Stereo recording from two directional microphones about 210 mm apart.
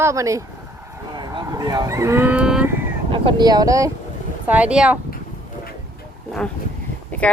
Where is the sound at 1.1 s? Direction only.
20° right (ahead or behind).